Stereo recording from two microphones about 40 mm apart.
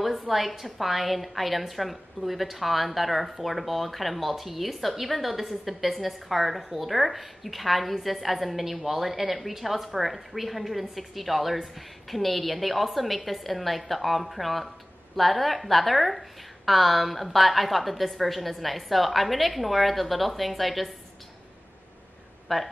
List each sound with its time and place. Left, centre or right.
0.2 s a woman's voice: centre
22.5 s a woman's voice: centre